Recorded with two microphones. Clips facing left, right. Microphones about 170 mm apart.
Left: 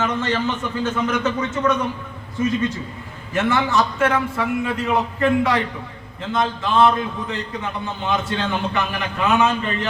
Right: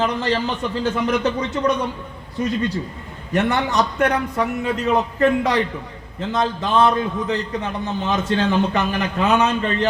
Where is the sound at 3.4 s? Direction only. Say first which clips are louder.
Left 1 dB; 35° right (ahead or behind).